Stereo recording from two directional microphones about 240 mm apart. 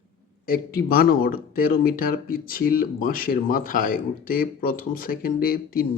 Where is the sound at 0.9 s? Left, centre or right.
Left.